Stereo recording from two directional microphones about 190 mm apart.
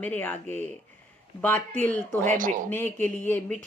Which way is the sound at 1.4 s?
10° left (ahead or behind).